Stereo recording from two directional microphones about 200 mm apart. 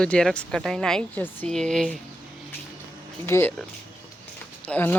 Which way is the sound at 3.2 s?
10° left (ahead or behind).